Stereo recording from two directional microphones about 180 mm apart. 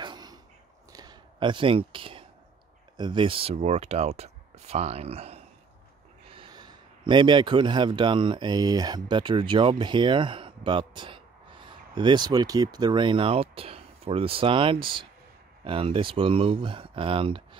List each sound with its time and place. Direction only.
0.0 s a sound: 25° right (ahead or behind)
3.0 s speech: 25° right (ahead or behind)
6.3 s a man's voice: 25° right (ahead or behind)